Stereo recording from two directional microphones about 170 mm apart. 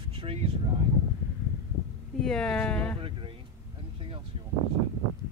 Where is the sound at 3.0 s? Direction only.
30° right (ahead or behind).